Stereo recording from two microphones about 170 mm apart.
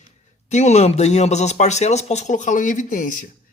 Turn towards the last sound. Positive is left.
turn(degrees=50)  # may be behind; listen again after turning